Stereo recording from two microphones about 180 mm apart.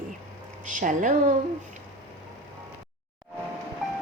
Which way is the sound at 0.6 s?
45° right (ahead or behind).